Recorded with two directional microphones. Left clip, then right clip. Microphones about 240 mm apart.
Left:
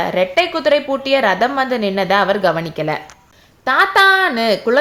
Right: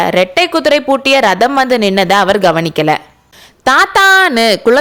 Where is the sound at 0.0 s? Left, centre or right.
Right.